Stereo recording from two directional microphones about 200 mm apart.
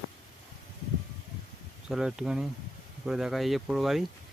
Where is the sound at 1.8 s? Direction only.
5° right (ahead or behind).